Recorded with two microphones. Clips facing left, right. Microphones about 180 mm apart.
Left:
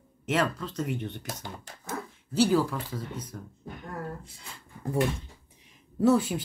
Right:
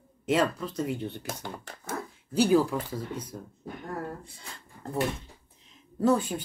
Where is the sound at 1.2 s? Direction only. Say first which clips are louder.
Right 2 dB; 50° right (ahead or behind).